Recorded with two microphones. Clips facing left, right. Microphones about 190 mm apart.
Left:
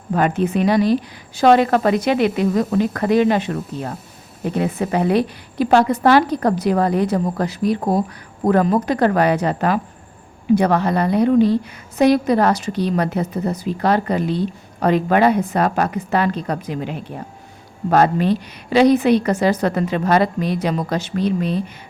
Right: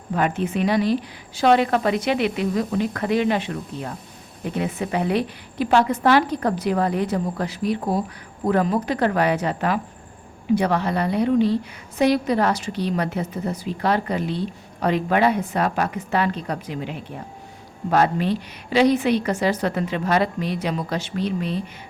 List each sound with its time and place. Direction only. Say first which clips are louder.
0.1 s a woman's voice: left 4 dB; 40° left (ahead or behind)
17.9 s a woman's voice: left 4 dB; 45° left (ahead or behind)